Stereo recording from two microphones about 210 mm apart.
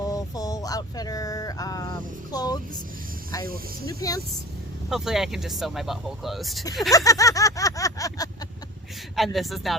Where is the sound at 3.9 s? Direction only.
15° left (ahead or behind).